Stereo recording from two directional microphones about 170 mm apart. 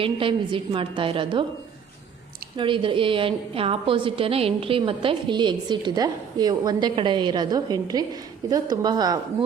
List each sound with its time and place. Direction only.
0.0 s a woman's voice: 30° right (ahead or behind)
2.6 s a woman's voice: 30° right (ahead or behind)